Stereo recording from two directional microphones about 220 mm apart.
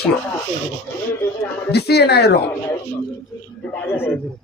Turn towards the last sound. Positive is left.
turn(degrees=10)  # may be behind; listen again after turning